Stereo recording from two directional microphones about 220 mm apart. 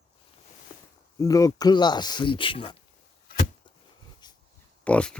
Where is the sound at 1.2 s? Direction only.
15° left (ahead or behind).